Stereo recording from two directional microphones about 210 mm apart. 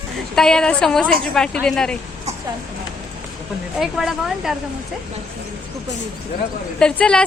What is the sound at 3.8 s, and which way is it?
Speech, centre (ahead or behind).